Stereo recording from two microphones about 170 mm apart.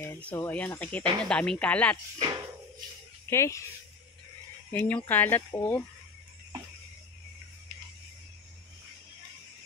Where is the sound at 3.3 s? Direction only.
15° left (ahead or behind).